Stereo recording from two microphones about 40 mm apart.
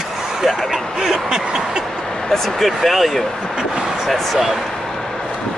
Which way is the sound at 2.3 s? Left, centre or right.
Centre.